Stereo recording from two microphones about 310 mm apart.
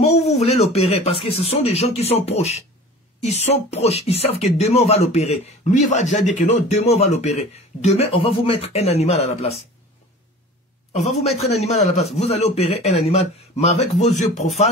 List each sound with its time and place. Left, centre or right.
0.1 s a woman's voice: centre
10.9 s speech: centre